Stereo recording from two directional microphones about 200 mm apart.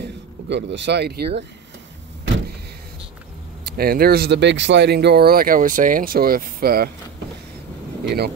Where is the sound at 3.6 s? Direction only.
50° right (ahead or behind).